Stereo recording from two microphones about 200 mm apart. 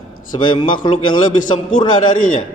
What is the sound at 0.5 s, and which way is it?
Mantra, 25° left (ahead or behind).